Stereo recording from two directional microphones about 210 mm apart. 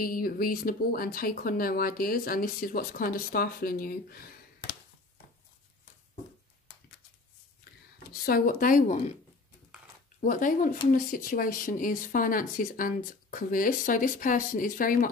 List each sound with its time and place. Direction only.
0.0 s speech: 45° left (ahead or behind)
8.1 s speech: 45° left (ahead or behind)
10.2 s speech: 40° left (ahead or behind)